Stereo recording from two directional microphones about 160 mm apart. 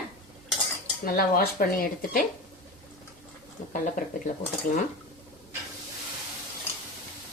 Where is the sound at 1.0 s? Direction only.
65° left (ahead or behind).